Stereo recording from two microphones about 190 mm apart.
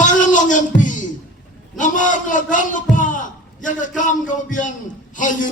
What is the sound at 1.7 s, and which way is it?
A man's voice, 40° left (ahead or behind).